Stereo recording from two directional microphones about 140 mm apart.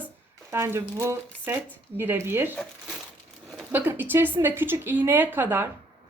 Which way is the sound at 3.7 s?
15° right (ahead or behind).